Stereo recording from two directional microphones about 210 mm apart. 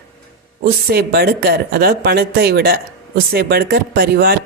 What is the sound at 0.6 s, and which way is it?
Speech, 45° right (ahead or behind).